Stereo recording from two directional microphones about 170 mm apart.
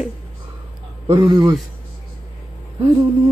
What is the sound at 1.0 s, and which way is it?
Speech, 25° right (ahead or behind).